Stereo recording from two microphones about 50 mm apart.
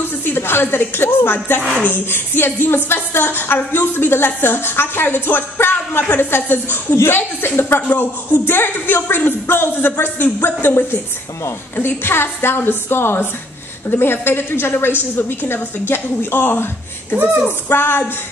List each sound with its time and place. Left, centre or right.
0.2 s a woman's voice: left
17.6 s a woman's voice: left